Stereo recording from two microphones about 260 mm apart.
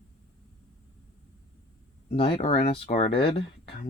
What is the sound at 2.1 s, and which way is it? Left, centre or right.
Speech, left.